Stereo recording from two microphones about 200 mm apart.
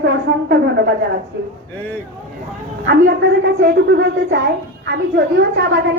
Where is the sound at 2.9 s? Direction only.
60° right (ahead or behind).